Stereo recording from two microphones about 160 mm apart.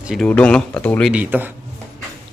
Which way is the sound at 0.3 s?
5° left (ahead or behind).